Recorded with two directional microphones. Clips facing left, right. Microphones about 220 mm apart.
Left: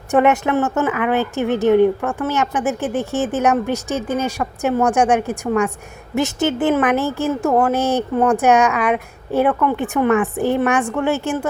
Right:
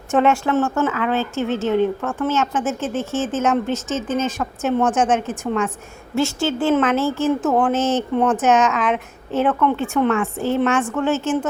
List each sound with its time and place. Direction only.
0.1 s a woman's voice: 15° left (ahead or behind)